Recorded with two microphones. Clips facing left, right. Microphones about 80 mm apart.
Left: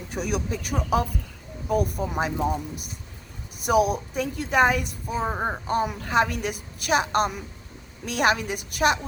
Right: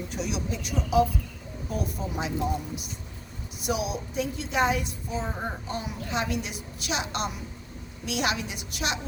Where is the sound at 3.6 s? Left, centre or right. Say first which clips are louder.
Left 8 dB; left.